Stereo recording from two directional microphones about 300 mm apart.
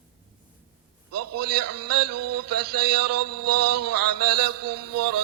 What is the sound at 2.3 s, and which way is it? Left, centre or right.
Music, right.